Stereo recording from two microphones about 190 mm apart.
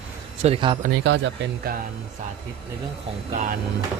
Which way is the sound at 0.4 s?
30° right (ahead or behind).